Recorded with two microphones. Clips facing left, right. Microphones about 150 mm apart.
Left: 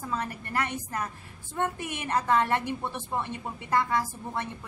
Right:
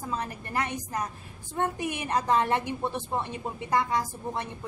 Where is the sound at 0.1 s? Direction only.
15° right (ahead or behind).